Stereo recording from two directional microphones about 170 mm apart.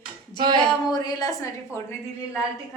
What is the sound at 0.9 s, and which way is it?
Speech, 25° left (ahead or behind).